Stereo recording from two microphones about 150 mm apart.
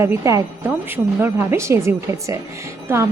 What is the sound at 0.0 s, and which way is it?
A woman's voice, 20° right (ahead or behind).